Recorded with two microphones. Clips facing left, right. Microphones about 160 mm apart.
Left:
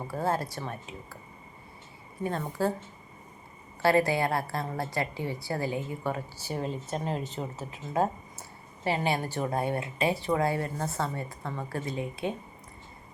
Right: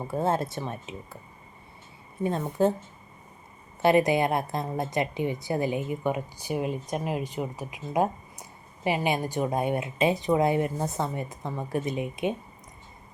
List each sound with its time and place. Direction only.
0.1 s speech: 25° right (ahead or behind)
2.5 s speech: 20° right (ahead or behind)
3.8 s a woman's voice: 20° right (ahead or behind)